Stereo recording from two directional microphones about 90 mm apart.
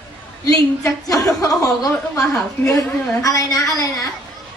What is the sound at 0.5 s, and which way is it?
A woman's voice, 40° left (ahead or behind).